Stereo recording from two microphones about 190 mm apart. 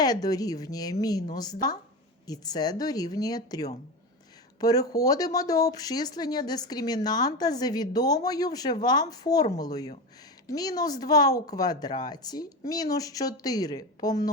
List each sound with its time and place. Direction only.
0.0 s speech: 20° left (ahead or behind)